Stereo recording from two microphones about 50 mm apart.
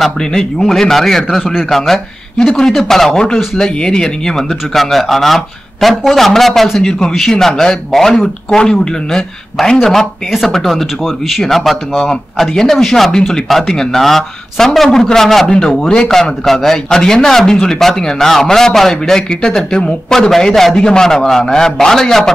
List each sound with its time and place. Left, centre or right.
0.0 s a man's voice: centre
1.4 s speech: centre
1.7 s a man's voice: centre
12.1 s a man's voice: centre